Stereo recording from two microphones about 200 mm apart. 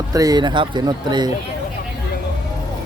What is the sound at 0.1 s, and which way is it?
Speech, 15° right (ahead or behind).